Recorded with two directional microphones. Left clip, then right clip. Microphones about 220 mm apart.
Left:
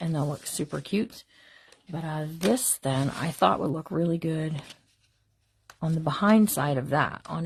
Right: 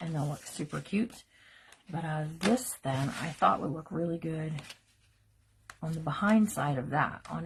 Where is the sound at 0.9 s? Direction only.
40° left (ahead or behind).